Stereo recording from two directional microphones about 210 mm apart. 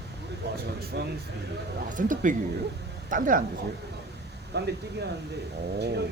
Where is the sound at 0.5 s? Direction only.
50° right (ahead or behind).